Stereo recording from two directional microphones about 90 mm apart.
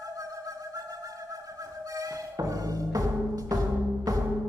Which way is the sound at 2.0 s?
40° right (ahead or behind).